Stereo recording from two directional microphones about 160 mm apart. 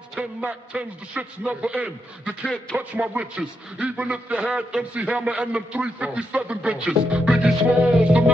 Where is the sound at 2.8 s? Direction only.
10° right (ahead or behind).